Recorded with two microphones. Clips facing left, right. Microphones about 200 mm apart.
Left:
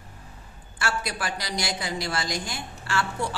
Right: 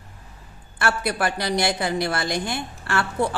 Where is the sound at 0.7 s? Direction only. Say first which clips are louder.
Right 6 dB; 60° right (ahead or behind).